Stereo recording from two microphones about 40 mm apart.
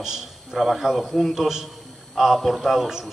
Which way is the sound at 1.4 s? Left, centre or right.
Centre.